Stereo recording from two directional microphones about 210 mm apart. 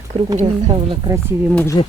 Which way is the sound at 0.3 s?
25° right (ahead or behind).